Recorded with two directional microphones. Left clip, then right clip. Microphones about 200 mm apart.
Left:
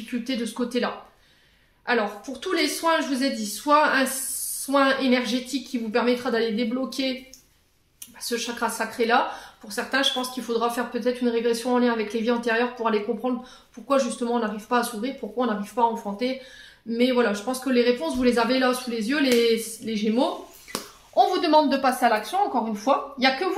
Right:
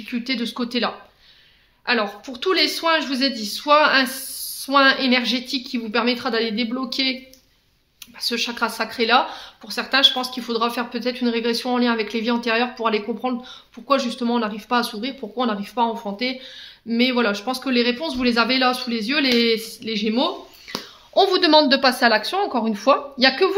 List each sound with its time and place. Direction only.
0.1 s speech: 35° right (ahead or behind)
8.2 s speech: 35° right (ahead or behind)
21.1 s speech: 50° right (ahead or behind)